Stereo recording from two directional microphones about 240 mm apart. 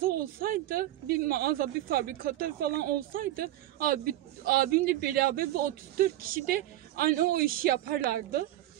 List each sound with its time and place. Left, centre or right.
0.0 s speech: right